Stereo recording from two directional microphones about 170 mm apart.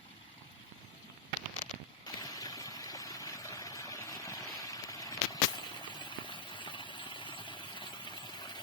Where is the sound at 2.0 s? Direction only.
20° left (ahead or behind).